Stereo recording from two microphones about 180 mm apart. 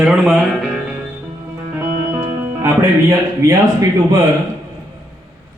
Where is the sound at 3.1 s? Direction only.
20° right (ahead or behind).